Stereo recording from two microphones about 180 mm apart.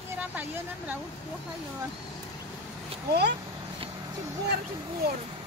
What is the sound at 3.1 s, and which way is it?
Speech, 65° right (ahead or behind).